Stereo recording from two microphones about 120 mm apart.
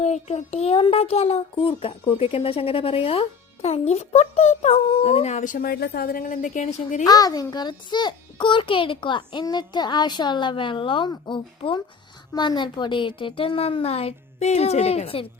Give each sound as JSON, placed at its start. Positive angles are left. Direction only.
{"t": 0.0, "sound": "speech", "side_deg": 65}
{"t": 6.2, "sound": "speech", "side_deg": 90}
{"t": 7.0, "sound": "a child's voice", "side_deg": 30}